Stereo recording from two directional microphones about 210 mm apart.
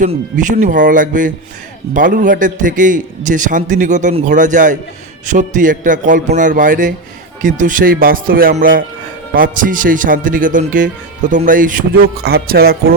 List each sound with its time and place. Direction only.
0.0 s speech: 40° right (ahead or behind)